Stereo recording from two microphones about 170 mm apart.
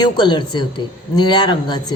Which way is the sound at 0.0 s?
25° left (ahead or behind).